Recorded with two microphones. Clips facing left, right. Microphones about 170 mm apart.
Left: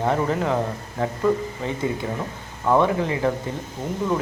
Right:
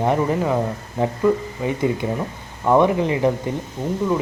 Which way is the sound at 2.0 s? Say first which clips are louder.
Right 4 dB; 20° right (ahead or behind).